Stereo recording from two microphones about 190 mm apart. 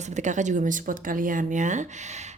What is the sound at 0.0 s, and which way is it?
Speech, 40° right (ahead or behind).